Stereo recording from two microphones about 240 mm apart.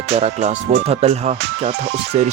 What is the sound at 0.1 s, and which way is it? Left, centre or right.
Speech, right.